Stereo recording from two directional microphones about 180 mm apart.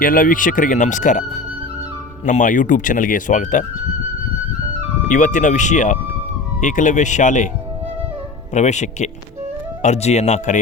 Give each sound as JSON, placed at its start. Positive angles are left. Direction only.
{"t": 0.0, "sound": "speech", "side_deg": 50}
{"t": 5.1, "sound": "speech", "side_deg": 45}
{"t": 8.5, "sound": "speech", "side_deg": 40}